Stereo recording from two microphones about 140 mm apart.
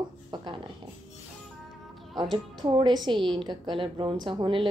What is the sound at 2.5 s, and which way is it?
A woman's voice, 30° right (ahead or behind).